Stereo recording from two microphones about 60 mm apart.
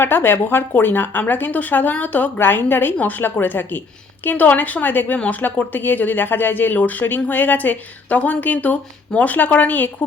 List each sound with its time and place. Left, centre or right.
0.0 s a woman's voice: left